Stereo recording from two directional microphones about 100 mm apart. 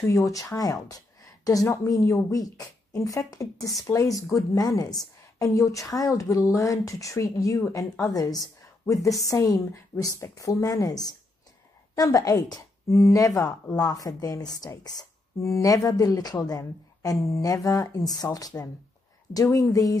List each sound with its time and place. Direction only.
0.0 s a woman's voice: 30° left (ahead or behind)